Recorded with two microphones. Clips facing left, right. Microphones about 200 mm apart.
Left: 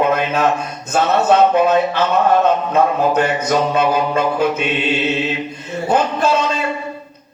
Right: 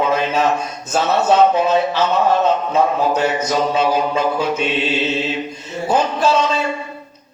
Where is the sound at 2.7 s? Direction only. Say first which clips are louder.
Left 2 dB; 55° left (ahead or behind).